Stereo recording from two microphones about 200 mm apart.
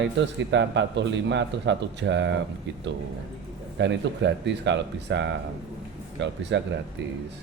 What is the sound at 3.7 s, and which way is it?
A man's voice, 60° right (ahead or behind).